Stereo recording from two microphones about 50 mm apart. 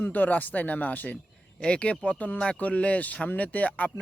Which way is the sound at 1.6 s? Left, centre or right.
Left.